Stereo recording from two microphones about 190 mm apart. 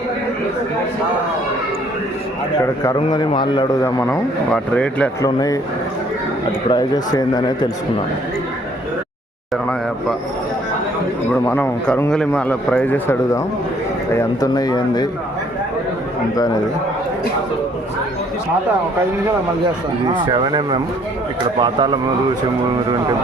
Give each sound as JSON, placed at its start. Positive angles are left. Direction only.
{"t": 2.8, "sound": "a man's voice", "side_deg": 20}
{"t": 5.2, "sound": "a man's voice", "side_deg": 20}
{"t": 6.7, "sound": "a man's voice", "side_deg": 20}
{"t": 11.4, "sound": "a man's voice", "side_deg": 10}
{"t": 20.1, "sound": "speech", "side_deg": -25}